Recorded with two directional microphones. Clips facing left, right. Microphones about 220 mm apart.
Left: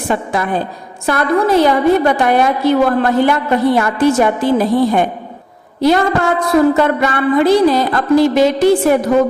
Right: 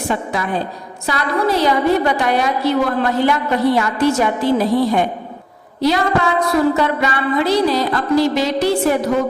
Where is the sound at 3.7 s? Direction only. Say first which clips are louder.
Left 4 dB; 50° left (ahead or behind).